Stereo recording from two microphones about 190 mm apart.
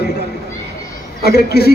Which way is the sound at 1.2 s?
55° left (ahead or behind).